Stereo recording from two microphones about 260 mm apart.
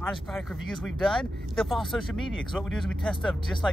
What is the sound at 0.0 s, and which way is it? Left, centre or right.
Speech, centre.